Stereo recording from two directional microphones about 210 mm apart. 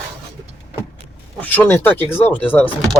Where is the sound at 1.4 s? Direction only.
10° left (ahead or behind).